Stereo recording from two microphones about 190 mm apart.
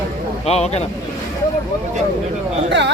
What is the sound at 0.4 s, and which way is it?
Speech, 35° left (ahead or behind).